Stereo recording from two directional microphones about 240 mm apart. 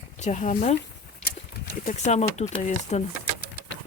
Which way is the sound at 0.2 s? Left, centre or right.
Left.